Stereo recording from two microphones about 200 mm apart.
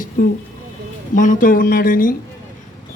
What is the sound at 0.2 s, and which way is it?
A man's voice, 45° left (ahead or behind).